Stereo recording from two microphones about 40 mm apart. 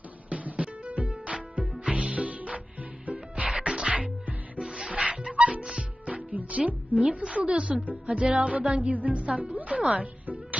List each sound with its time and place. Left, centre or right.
0.3 s music: right
1.6 s music: centre
1.9 s music: right
3.9 s music: right
4.6 s music: centre
6.3 s music: right
7.3 s speech: right
7.9 s music: right